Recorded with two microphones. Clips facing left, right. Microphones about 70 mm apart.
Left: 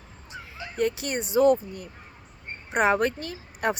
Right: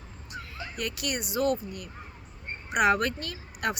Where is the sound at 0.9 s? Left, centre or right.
Left.